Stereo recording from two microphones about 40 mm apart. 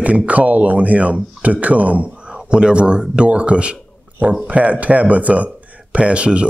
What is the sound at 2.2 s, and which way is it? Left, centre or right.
A man's voice, right.